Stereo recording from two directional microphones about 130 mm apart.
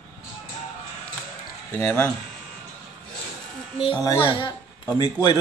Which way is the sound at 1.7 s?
20° left (ahead or behind).